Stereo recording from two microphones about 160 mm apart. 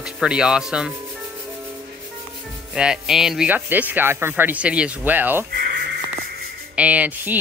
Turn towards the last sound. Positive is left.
turn(degrees=-10)  # may be behind; listen again after turning